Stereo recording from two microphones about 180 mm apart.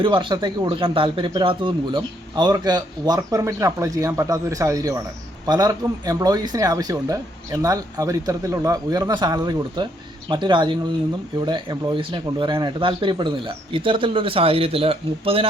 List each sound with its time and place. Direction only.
0.0 s speech: 25° right (ahead or behind)